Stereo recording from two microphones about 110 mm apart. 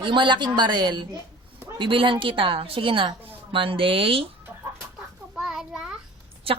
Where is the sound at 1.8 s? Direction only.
50° right (ahead or behind).